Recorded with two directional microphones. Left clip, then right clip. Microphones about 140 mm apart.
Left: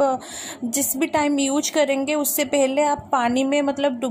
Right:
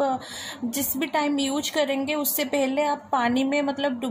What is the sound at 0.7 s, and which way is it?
A woman's voice, 35° left (ahead or behind).